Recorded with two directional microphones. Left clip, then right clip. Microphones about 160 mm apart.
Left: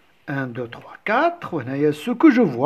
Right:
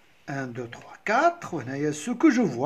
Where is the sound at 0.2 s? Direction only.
30° left (ahead or behind).